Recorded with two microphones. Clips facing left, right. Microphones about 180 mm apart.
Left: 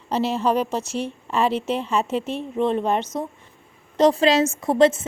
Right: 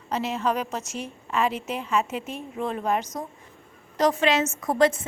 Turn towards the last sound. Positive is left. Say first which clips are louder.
# left 4 dB
turn(degrees=25)  # may be behind; listen again after turning